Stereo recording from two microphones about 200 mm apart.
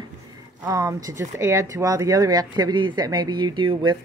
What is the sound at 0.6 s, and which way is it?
Speech, 15° right (ahead or behind).